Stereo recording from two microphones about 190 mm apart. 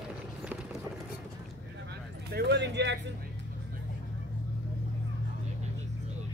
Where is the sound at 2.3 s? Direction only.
60° right (ahead or behind).